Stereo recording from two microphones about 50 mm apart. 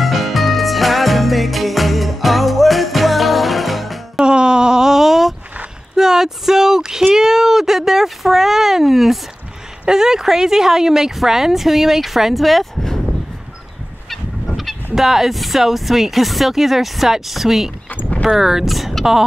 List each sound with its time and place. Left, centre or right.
0.0 s music: centre
4.2 s a sound: centre
9.8 s speech: centre
14.1 s fowl: centre
15.0 s speech: centre
17.8 s a sound: left
18.3 s speech: centre